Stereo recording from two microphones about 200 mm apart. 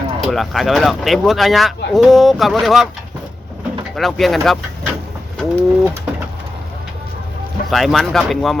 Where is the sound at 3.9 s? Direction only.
Centre (ahead or behind).